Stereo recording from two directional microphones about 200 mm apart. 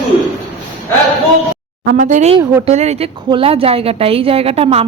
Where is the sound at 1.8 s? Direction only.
40° right (ahead or behind).